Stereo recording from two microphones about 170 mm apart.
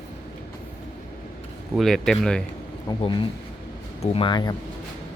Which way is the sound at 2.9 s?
25° left (ahead or behind).